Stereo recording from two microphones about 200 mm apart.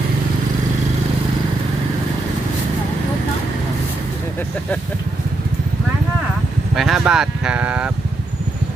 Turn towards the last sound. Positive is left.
turn(degrees=-5)  # may be behind; listen again after turning